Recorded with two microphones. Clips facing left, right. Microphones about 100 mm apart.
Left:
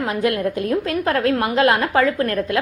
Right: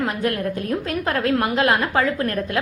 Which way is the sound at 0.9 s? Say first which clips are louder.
Even; 50° left (ahead or behind).